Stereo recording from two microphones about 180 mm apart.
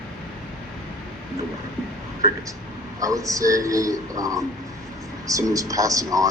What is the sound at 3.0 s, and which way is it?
Speech, 20° right (ahead or behind).